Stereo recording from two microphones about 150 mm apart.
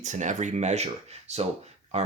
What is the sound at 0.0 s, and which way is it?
Speech, 55° right (ahead or behind).